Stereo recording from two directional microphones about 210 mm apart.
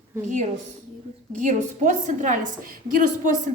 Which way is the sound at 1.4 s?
35° right (ahead or behind).